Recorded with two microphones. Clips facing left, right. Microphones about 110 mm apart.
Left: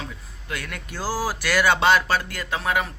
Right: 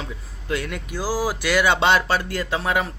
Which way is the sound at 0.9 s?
15° right (ahead or behind).